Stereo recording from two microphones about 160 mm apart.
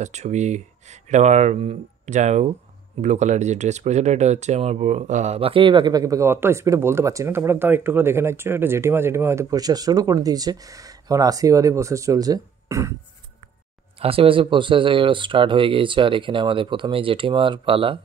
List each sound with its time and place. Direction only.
0.0 s speech: 45° right (ahead or behind); by 12.9 s 20° right (ahead or behind)
14.0 s speech: 35° right (ahead or behind)